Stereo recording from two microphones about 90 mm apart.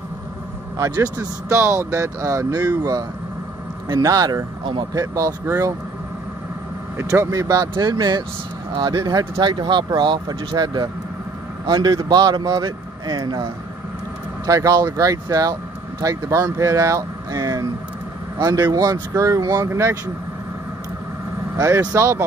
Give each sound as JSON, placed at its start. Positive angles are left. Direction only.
{"t": 0.7, "sound": "speech", "side_deg": -35}
{"t": 7.0, "sound": "speech", "side_deg": -35}
{"t": 7.7, "sound": "speech", "side_deg": -55}
{"t": 14.4, "sound": "speech", "side_deg": -40}
{"t": 21.5, "sound": "speech", "side_deg": -30}